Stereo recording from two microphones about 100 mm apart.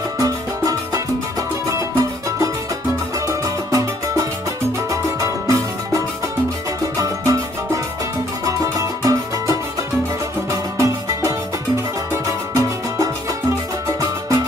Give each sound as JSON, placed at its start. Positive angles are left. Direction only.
{"t": 0.2, "sound": "music", "side_deg": -35}